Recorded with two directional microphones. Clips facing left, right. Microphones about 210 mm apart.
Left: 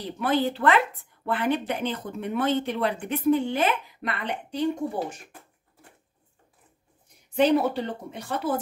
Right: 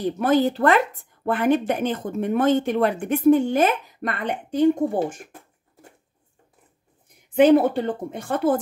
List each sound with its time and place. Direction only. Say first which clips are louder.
0.0 s a woman's voice: right 6 dB; 45° right (ahead or behind)
7.3 s a woman's voice: right 6 dB; 50° right (ahead or behind)